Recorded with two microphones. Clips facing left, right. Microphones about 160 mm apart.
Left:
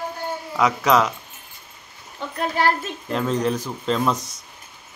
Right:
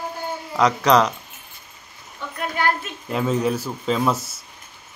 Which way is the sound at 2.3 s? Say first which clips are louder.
Left 2 dB; 35° left (ahead or behind).